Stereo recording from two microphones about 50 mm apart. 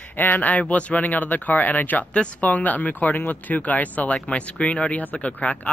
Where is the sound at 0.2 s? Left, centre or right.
Left.